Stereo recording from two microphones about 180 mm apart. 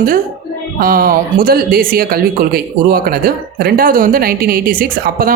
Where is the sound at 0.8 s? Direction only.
55° right (ahead or behind).